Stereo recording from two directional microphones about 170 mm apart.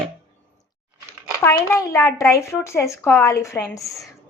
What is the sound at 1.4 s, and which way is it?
Speech, 15° left (ahead or behind).